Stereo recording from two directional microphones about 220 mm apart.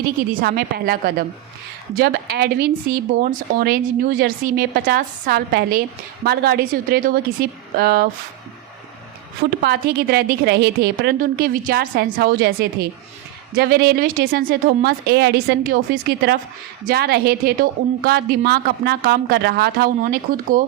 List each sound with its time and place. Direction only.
0.4 s a woman's voice: 45° right (ahead or behind)
9.5 s a woman's voice: 45° right (ahead or behind)